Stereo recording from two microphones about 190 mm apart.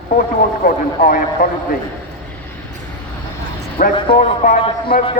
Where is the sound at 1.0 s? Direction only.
45° left (ahead or behind).